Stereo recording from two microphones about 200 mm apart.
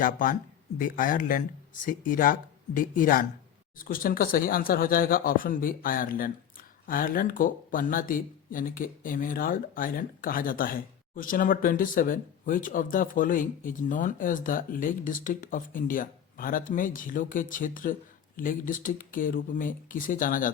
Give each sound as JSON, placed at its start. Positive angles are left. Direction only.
{"t": 0.0, "sound": "speech", "side_deg": 40}